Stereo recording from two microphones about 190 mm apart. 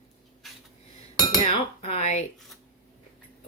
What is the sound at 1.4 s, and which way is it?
Speech, 35° left (ahead or behind).